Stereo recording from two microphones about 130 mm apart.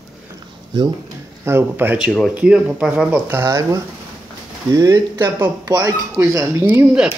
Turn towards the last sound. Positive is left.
turn(degrees=-5)  # may be behind; listen again after turning